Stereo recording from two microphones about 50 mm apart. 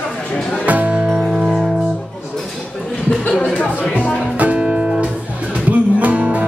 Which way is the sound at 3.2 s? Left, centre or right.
Left.